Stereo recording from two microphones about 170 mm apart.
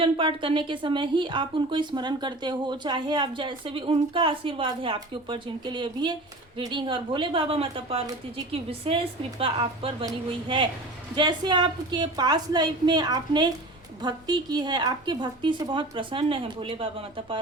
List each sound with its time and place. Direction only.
0.0 s a woman's voice: 30° right (ahead or behind)
9.4 s a woman's voice: 30° right (ahead or behind)